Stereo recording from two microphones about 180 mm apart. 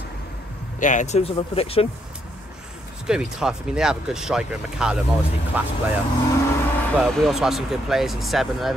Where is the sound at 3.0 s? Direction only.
5° right (ahead or behind).